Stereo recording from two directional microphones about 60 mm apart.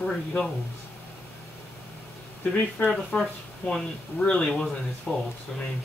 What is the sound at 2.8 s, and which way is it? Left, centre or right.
Speech, left.